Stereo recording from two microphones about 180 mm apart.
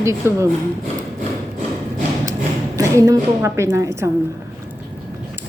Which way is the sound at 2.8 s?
20° right (ahead or behind).